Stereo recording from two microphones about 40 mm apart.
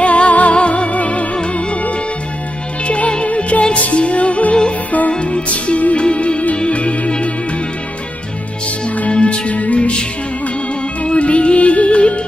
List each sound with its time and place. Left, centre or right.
0.0 s music: left
2.9 s music: left
9.1 s music: left
11.1 s music: left